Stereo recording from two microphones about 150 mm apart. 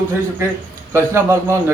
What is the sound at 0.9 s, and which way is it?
Speech, 20° right (ahead or behind).